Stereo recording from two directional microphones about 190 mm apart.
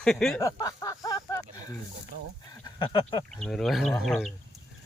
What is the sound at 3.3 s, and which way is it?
Speech, centre (ahead or behind).